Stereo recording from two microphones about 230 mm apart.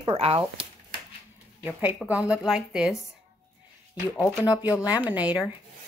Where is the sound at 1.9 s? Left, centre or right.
Centre.